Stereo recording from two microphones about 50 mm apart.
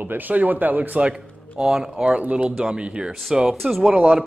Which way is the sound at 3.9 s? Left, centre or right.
Right.